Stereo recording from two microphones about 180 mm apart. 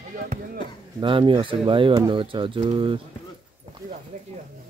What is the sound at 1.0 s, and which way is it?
Speech, 30° right (ahead or behind).